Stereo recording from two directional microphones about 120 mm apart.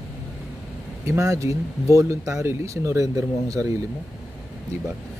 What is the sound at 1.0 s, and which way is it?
Speech, 25° right (ahead or behind).